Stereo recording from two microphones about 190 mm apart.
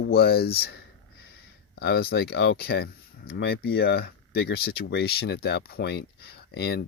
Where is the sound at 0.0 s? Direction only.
55° left (ahead or behind).